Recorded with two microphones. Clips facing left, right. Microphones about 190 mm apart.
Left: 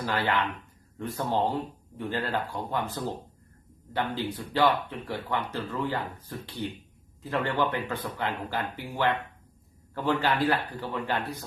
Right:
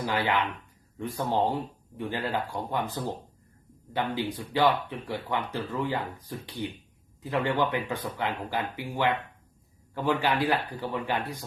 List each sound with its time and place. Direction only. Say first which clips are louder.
0.0 s speech: right 1 dB; 15° right (ahead or behind)
3.9 s speech: right 1 dB; 15° right (ahead or behind)